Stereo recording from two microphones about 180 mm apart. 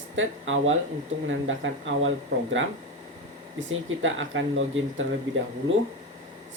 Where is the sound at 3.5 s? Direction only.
90° right.